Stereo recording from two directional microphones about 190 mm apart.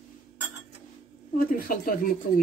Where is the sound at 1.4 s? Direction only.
50° left (ahead or behind).